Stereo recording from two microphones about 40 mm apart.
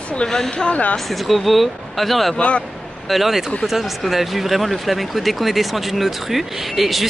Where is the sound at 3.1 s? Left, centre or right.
Centre.